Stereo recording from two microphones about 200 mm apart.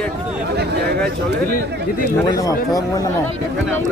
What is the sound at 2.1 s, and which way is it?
Speech, 15° left (ahead or behind).